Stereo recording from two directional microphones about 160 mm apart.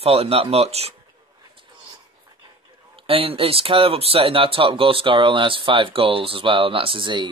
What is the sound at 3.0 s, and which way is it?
Speech, 35° right (ahead or behind).